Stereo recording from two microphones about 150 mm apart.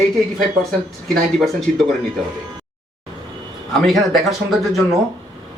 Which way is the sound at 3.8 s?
Centre (ahead or behind).